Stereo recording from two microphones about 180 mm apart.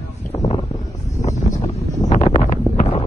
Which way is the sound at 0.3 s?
35° left (ahead or behind).